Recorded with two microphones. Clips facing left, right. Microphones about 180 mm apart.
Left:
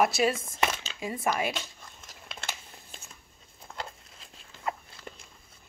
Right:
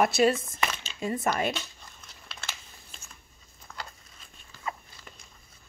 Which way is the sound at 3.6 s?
25° left (ahead or behind).